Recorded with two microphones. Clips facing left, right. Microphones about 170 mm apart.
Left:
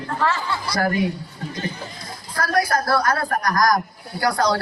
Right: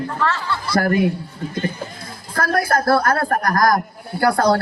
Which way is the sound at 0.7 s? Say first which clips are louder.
Right 5 dB; 55° right (ahead or behind).